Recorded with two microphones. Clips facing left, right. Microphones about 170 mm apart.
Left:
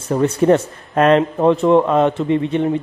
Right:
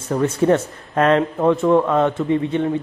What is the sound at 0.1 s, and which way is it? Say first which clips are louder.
Speech: left 3 dB; 25° left (ahead or behind).